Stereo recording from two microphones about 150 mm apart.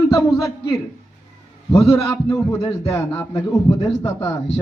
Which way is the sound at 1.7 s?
20° left (ahead or behind).